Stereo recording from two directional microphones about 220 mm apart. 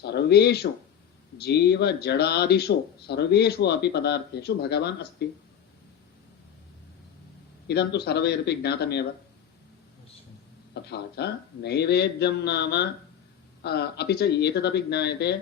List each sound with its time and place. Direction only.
0.0 s speech: 50° left (ahead or behind)
7.7 s speech: 50° left (ahead or behind)
10.8 s speech: 50° left (ahead or behind)